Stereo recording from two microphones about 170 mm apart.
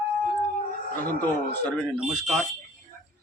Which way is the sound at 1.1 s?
10° left (ahead or behind).